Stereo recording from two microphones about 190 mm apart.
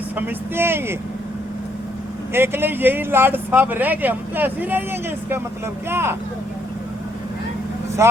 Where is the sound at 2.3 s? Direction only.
10° right (ahead or behind).